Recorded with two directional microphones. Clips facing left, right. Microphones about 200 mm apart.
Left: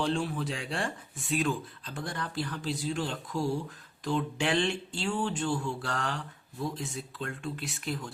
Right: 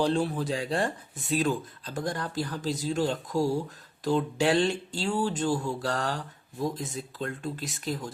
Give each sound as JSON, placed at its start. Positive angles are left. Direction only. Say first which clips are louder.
{"t": 0.0, "sound": "speech", "louder": "right 4 dB", "side_deg": -40}